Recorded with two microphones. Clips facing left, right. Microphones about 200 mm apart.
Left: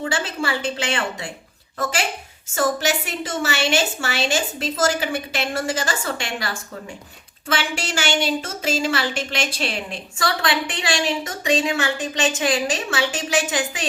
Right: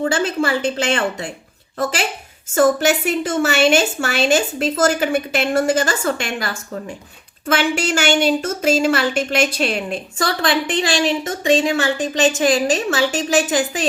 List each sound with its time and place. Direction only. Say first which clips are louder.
0.0 s a woman's voice: right 6 dB; 45° right (ahead or behind)
2.6 s a woman's voice: right 7 dB; 50° right (ahead or behind)